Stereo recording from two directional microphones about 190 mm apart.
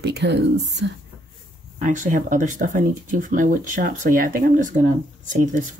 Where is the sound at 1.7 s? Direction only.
40° right (ahead or behind).